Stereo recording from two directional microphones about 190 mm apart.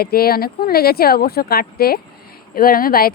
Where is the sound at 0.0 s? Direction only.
55° left (ahead or behind).